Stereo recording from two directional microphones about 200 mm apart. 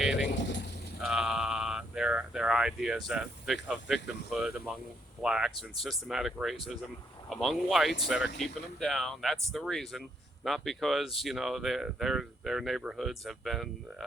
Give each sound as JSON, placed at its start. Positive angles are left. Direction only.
{"t": 0.0, "sound": "vehicle", "side_deg": 0}
{"t": 0.3, "sound": "vehicle", "side_deg": 60}
{"t": 1.0, "sound": "a sound", "side_deg": -5}
{"t": 5.2, "sound": "speech", "side_deg": -5}